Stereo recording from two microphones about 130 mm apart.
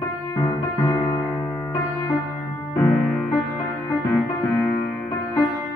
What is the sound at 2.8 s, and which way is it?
Music, 10° left (ahead or behind).